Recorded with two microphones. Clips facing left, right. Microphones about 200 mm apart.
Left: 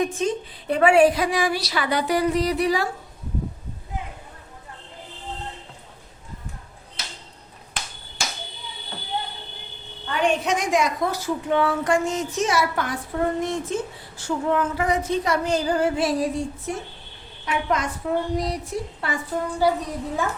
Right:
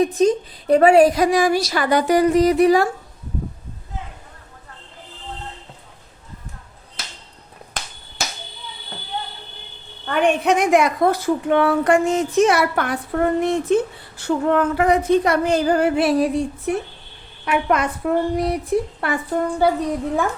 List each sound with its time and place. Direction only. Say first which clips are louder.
0.0 s a woman's voice: right 7 dB; 40° right (ahead or behind)
10.1 s a woman's voice: right 5 dB; 55° right (ahead or behind)